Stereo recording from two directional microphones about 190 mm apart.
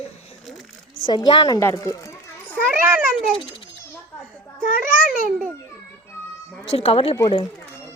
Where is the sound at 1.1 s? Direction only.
25° left (ahead or behind).